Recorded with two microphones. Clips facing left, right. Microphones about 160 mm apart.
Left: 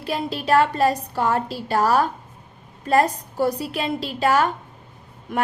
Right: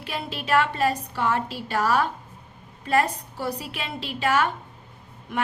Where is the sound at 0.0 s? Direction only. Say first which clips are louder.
Left 6 dB; 40° left (ahead or behind).